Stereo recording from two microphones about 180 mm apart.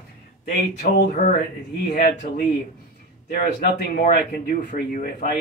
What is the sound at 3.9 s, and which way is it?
Speech, 55° left (ahead or behind).